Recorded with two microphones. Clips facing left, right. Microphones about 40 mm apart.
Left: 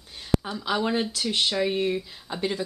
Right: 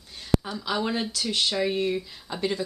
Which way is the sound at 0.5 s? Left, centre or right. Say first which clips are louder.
Left 2 dB; centre.